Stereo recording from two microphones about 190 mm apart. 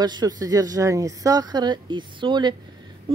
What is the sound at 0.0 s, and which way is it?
Speech, 20° right (ahead or behind).